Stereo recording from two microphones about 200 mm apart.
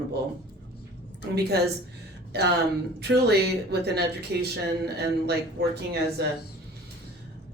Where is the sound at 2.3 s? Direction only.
55° right (ahead or behind).